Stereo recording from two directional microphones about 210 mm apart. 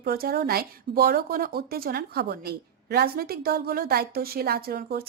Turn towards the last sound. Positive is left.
turn(degrees=-45)  # may be behind; listen again after turning